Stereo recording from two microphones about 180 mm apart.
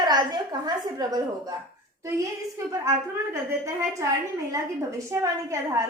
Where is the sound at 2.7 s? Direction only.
15° right (ahead or behind).